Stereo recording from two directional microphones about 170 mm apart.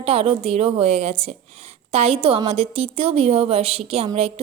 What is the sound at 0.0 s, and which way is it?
A woman's voice, 35° right (ahead or behind).